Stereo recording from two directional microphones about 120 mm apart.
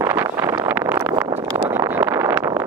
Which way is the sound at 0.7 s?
25° right (ahead or behind).